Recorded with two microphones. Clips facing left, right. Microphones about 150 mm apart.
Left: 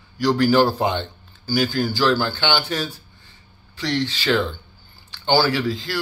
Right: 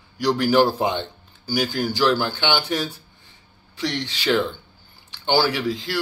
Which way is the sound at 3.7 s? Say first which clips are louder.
Left 3 dB; 20° right (ahead or behind).